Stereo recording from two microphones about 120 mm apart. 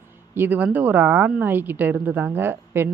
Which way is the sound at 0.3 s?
15° right (ahead or behind).